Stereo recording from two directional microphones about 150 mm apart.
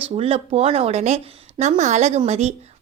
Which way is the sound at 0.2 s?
40° right (ahead or behind).